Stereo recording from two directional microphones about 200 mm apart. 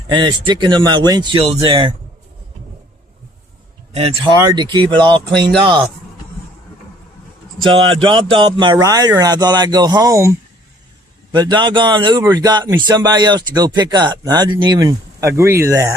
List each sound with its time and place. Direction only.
0.1 s speech: 25° right (ahead or behind)
3.9 s speech: 25° right (ahead or behind)
7.6 s speech: 25° right (ahead or behind)
11.3 s speech: 20° right (ahead or behind)